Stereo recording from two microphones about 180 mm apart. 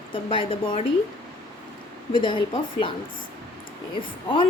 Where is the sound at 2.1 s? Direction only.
25° left (ahead or behind).